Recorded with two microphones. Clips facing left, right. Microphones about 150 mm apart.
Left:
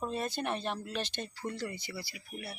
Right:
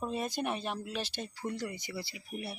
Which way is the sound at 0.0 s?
10° right (ahead or behind).